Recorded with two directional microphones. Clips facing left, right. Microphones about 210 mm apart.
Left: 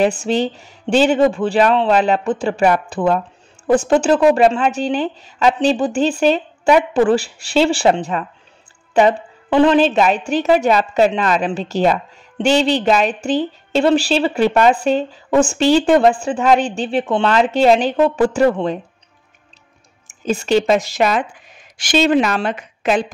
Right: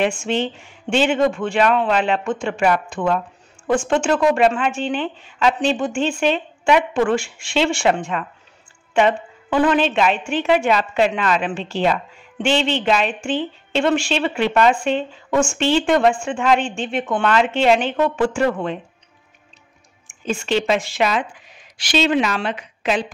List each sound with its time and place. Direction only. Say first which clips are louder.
0.0 s a woman's voice: left 4 dB; 35° left (ahead or behind)
20.1 s speech: left 5 dB; 40° left (ahead or behind)